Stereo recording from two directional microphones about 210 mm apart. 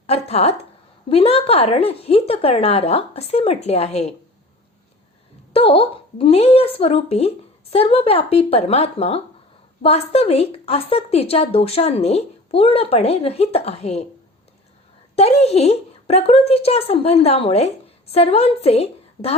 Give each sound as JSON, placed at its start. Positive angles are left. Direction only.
{"t": 0.1, "sound": "speech", "side_deg": 30}
{"t": 5.5, "sound": "speech", "side_deg": 25}
{"t": 15.1, "sound": "speech", "side_deg": 30}